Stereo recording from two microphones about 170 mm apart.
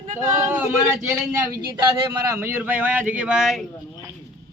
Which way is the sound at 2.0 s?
20° right (ahead or behind).